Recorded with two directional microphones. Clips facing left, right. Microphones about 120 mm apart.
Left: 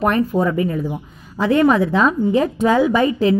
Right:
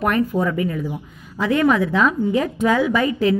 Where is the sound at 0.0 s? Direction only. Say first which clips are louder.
Left 2 dB; 30° left (ahead or behind).